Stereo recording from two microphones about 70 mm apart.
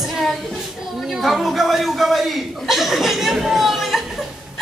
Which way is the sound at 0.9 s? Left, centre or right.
Centre.